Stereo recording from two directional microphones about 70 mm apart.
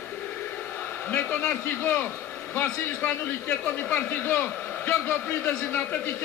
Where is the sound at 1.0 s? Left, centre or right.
Left.